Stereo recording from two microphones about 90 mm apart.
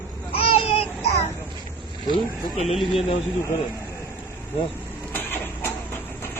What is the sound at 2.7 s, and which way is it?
Speech, centre (ahead or behind).